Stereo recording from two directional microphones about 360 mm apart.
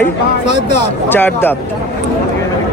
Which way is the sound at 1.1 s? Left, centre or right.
Centre.